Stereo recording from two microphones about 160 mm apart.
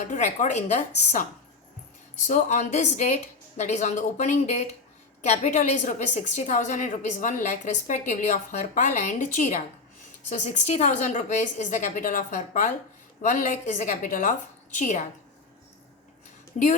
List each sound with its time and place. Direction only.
0.0 s a woman's voice: 50° left (ahead or behind)
2.2 s a woman's voice: 45° left (ahead or behind)